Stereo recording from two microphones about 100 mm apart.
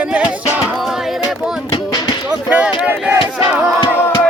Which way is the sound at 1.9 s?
45° left (ahead or behind).